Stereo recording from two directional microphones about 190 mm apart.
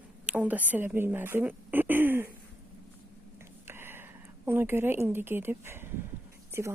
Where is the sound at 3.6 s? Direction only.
10° right (ahead or behind).